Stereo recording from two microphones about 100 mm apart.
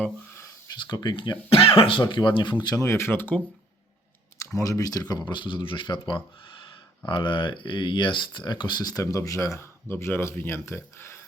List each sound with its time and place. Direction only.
0.8 s speech: 45° left (ahead or behind)
2.8 s speech: 25° left (ahead or behind)
4.5 s speech: 35° left (ahead or behind); by 6.0 s 55° left (ahead or behind)
7.0 s speech: 55° left (ahead or behind); by 11.2 s 25° left (ahead or behind)